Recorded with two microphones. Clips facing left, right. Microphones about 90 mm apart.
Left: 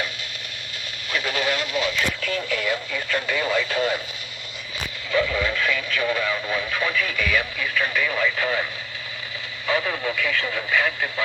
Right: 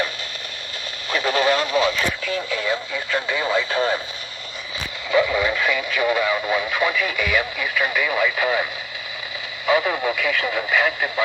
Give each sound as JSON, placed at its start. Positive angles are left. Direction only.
{"t": 1.1, "sound": "speech", "side_deg": -30}
{"t": 5.1, "sound": "speech", "side_deg": -20}
{"t": 9.6, "sound": "speech", "side_deg": -15}